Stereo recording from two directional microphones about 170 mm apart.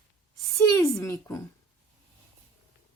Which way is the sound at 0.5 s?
20° left (ahead or behind).